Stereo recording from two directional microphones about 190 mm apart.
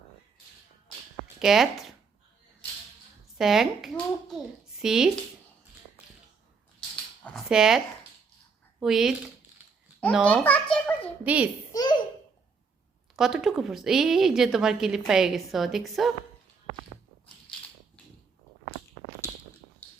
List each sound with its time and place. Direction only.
1.4 s a woman's voice: centre (ahead or behind)
3.3 s a woman's voice: centre (ahead or behind)
7.3 s speech: centre (ahead or behind)
8.8 s a woman's voice: centre (ahead or behind)
10.2 s a child's voice: 10° left (ahead or behind)
11.2 s a child's voice: 5° right (ahead or behind)
11.7 s baby laughter: 20° left (ahead or behind)
13.1 s a woman's voice: centre (ahead or behind)